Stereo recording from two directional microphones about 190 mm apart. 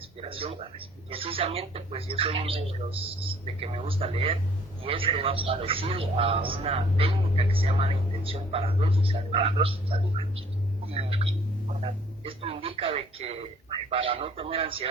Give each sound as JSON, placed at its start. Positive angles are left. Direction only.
{"t": 0.2, "sound": "a man's voice", "side_deg": -30}